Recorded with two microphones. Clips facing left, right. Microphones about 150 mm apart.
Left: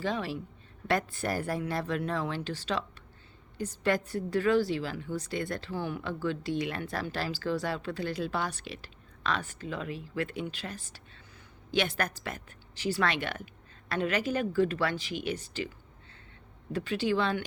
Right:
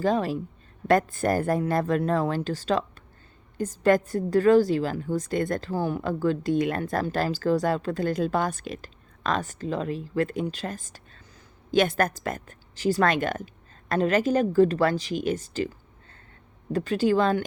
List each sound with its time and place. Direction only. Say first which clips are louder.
0.0 s a woman's voice: right 8 dB; 45° right (ahead or behind)
16.7 s a woman's voice: right 6 dB; 45° right (ahead or behind)